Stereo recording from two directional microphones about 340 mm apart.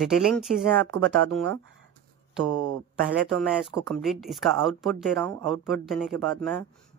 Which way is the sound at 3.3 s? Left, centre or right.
Centre.